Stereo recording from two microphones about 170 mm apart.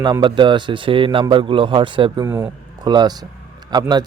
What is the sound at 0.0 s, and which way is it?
A man's voice, 25° right (ahead or behind).